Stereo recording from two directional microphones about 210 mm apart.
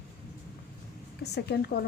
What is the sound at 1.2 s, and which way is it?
Speech, 50° left (ahead or behind).